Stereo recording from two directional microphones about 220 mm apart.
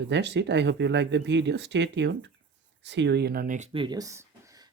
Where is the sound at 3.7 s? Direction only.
20° right (ahead or behind).